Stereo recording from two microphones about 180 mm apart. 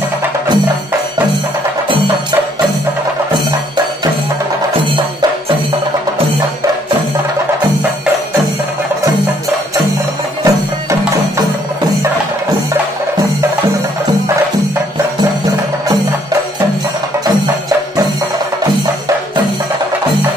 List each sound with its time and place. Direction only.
10.4 s music: 15° right (ahead or behind)